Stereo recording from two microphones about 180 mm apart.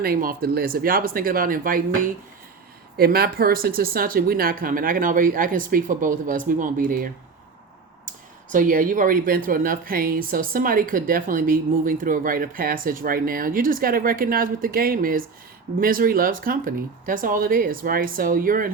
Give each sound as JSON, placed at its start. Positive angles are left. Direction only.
{"t": 0.0, "sound": "speech", "side_deg": -55}
{"t": 3.0, "sound": "speech", "side_deg": -55}